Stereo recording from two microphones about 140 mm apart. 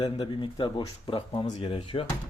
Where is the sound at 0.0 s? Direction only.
35° left (ahead or behind).